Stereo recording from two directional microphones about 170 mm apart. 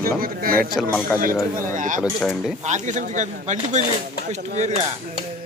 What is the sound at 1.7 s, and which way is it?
Speech, 50° right (ahead or behind).